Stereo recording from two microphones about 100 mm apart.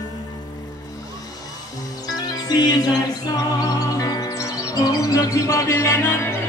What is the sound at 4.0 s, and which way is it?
Music, 35° left (ahead or behind).